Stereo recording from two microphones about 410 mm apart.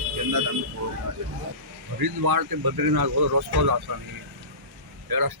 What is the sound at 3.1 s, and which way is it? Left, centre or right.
Speech, right.